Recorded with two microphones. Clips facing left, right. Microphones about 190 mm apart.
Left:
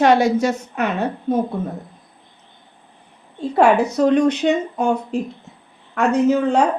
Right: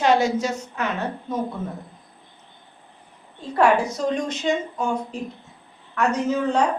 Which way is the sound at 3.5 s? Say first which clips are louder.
Left 4 dB; 65° left (ahead or behind).